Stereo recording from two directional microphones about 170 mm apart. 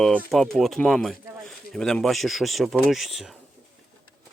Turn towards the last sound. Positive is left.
turn(degrees=0)  # may be behind; listen again after turning